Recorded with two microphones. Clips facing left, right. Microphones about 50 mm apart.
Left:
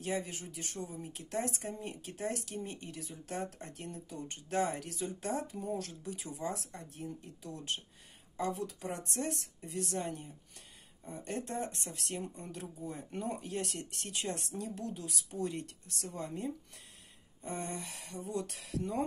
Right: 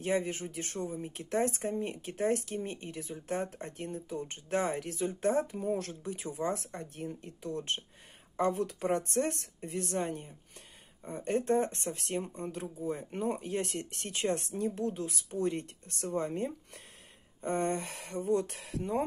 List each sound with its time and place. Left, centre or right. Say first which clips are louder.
0.0 s speech: right 6 dB; right